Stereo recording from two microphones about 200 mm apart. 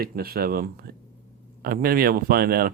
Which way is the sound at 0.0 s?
50° right (ahead or behind).